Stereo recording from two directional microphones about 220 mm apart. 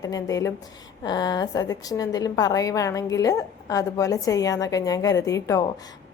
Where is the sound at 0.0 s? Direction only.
15° left (ahead or behind).